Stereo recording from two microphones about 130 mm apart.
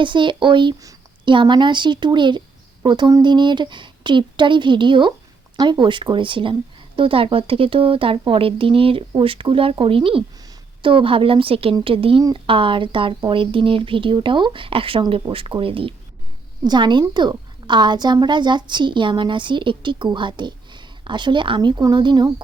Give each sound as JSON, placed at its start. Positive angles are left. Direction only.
{"t": 0.0, "sound": "a woman's voice", "side_deg": -40}
{"t": 0.8, "sound": "a sound", "side_deg": -25}
{"t": 1.3, "sound": "a woman's voice", "side_deg": -35}